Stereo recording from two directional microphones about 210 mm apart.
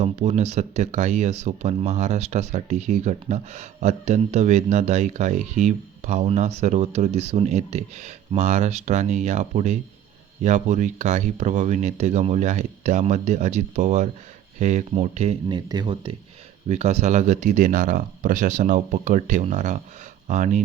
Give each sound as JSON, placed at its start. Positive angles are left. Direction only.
{"t": 0.0, "sound": "speech", "side_deg": -35}